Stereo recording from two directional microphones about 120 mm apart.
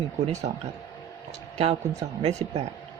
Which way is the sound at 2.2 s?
65° right (ahead or behind).